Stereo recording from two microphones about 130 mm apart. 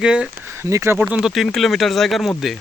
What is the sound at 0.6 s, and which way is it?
Speech, 20° right (ahead or behind).